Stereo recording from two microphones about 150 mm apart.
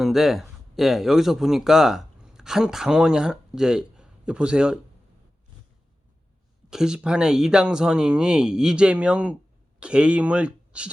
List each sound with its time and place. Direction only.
0.0 s speech: centre (ahead or behind)
6.7 s speech: 5° right (ahead or behind)